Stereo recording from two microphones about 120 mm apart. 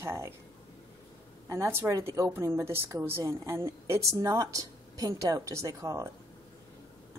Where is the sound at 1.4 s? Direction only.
20° right (ahead or behind).